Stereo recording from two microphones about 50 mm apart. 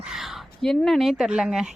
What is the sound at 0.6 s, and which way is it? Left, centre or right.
Speech, centre.